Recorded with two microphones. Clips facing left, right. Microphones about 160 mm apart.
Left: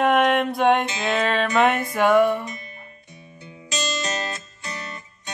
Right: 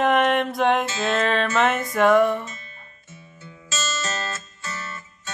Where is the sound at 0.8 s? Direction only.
15° left (ahead or behind).